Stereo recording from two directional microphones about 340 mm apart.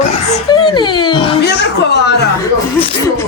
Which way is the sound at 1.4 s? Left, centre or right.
Left.